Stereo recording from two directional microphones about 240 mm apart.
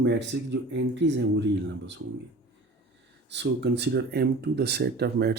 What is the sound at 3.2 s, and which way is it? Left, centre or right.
Speech, right.